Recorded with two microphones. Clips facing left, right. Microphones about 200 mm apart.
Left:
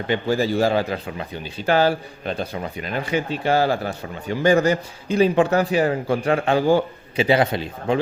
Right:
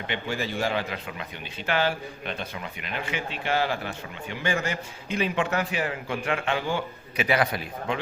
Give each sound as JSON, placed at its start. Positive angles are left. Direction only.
{"t": 0.1, "sound": "a man's voice", "side_deg": 35}